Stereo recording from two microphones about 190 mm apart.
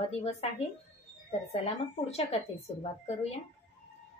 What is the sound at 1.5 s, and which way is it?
A woman's voice, 35° left (ahead or behind).